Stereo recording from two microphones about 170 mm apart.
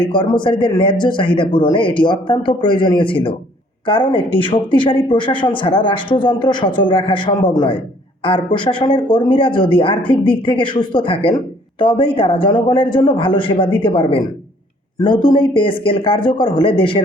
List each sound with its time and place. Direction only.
0.0 s speech: 30° left (ahead or behind)